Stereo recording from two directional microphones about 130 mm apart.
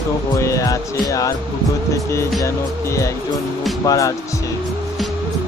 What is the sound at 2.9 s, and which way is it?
Speech, 25° left (ahead or behind).